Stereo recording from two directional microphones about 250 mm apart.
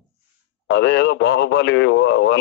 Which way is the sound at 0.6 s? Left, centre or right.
Left.